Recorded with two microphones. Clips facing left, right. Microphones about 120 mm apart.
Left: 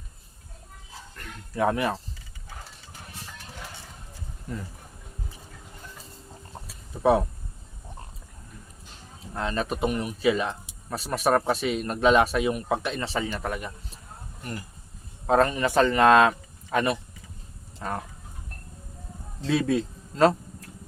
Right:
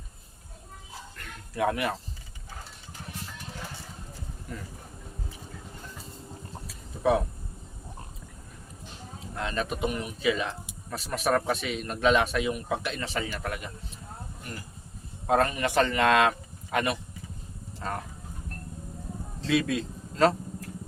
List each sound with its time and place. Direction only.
1.5 s speech: 35° left (ahead or behind)
6.7 s a sound: 30° left (ahead or behind)
9.3 s speech: 35° left (ahead or behind)
15.3 s speech: 30° left (ahead or behind)
19.5 s speech: 30° left (ahead or behind)